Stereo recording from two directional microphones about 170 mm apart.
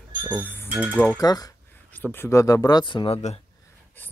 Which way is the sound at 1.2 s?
20° left (ahead or behind).